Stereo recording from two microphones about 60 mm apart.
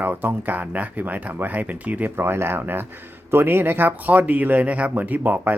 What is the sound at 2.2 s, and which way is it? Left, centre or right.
Speech, right.